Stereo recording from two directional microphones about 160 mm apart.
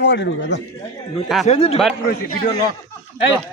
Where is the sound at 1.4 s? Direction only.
40° left (ahead or behind).